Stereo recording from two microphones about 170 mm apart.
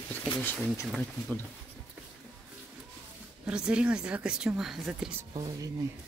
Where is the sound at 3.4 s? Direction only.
5° right (ahead or behind).